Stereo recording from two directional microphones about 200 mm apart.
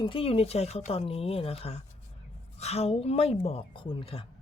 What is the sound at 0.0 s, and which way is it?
Speech, 25° left (ahead or behind).